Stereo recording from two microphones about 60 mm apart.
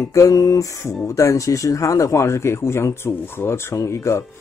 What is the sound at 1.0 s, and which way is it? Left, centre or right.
Speech, left.